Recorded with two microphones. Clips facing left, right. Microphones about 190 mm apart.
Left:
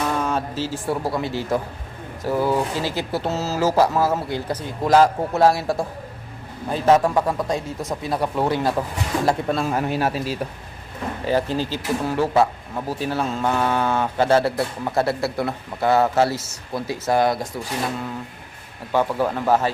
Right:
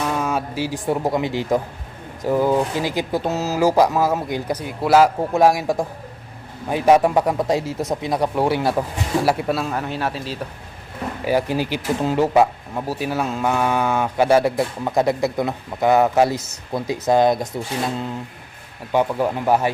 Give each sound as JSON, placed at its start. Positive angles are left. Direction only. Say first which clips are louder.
{"t": 0.1, "sound": "speech", "louder": "right 1 dB", "side_deg": -10}
{"t": 9.6, "sound": "a man's voice", "louder": "left 3 dB", "side_deg": 10}
{"t": 11.3, "sound": "speech", "louder": "right 2 dB", "side_deg": -10}
{"t": 18.9, "sound": "speech", "louder": "right 1 dB", "side_deg": -15}